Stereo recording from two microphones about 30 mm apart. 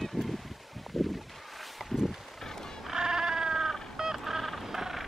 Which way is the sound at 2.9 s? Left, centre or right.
Right.